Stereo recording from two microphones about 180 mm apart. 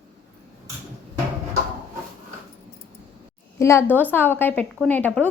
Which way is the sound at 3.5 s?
15° left (ahead or behind).